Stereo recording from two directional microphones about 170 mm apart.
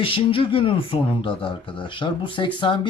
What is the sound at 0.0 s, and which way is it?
Speech, 30° left (ahead or behind).